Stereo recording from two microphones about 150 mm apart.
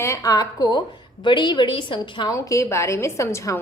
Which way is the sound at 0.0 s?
20° left (ahead or behind).